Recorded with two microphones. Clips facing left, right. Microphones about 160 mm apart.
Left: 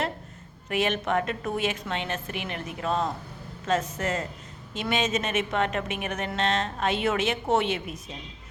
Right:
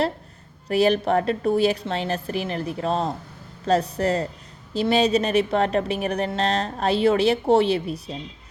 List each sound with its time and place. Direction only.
0.7 s a woman's voice: 35° right (ahead or behind)